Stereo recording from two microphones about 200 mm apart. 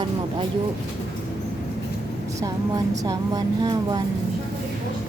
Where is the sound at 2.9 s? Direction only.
20° right (ahead or behind).